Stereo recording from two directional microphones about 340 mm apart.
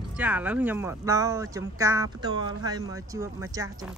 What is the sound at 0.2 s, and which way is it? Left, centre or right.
Speech, centre.